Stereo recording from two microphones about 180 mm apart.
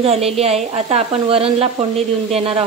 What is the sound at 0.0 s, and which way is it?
Speech, 35° right (ahead or behind).